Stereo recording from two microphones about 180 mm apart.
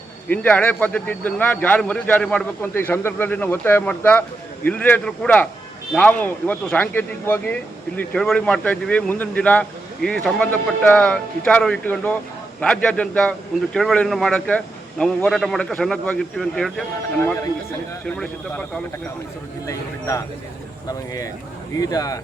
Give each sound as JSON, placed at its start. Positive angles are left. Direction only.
{"t": 0.3, "sound": "speech", "side_deg": 10}
{"t": 17.2, "sound": "speech", "side_deg": 15}
{"t": 19.6, "sound": "speech", "side_deg": 20}